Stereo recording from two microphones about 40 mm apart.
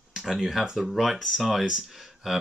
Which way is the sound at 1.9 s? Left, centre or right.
Centre.